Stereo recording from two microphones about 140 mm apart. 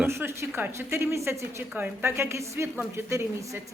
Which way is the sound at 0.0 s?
15° right (ahead or behind).